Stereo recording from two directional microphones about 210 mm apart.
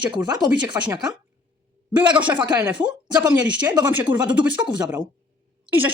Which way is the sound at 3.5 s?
5° right (ahead or behind).